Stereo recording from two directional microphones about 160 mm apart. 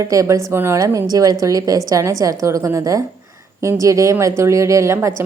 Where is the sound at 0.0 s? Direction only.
20° right (ahead or behind).